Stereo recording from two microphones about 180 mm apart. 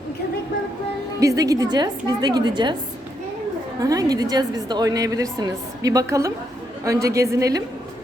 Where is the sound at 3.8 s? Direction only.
20° right (ahead or behind).